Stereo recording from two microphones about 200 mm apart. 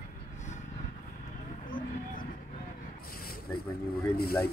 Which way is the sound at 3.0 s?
45° left (ahead or behind).